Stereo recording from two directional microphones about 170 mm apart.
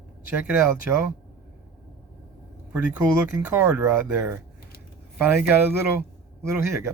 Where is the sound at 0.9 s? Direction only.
10° right (ahead or behind).